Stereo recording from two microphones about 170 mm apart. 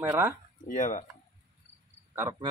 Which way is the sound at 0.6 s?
50° left (ahead or behind).